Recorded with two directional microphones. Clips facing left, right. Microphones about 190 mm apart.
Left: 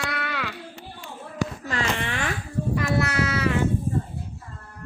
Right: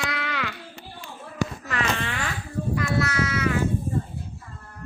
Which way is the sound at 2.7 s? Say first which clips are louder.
Left 1 dB; 30° left (ahead or behind).